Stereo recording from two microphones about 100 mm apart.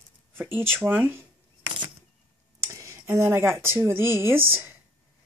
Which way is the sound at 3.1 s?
25° right (ahead or behind).